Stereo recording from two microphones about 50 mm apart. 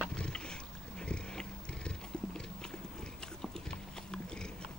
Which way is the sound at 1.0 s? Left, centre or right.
Centre.